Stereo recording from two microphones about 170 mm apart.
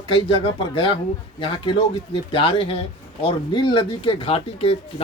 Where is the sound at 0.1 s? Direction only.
35° left (ahead or behind).